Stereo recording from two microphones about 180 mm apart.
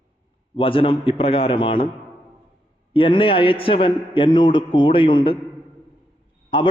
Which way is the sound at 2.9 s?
30° left (ahead or behind).